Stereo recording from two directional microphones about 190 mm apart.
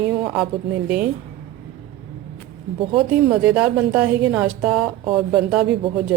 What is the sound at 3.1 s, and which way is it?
A woman's voice, 5° right (ahead or behind).